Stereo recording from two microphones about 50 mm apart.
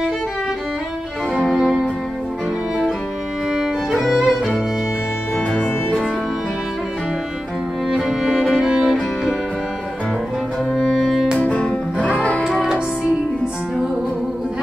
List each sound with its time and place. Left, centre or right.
1.5 s music: centre
3.5 s music: centre
7.9 s music: centre
10.7 s music: centre
11.3 s music: left